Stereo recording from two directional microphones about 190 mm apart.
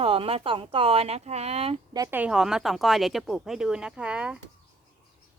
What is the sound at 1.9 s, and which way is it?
Speech, 15° right (ahead or behind).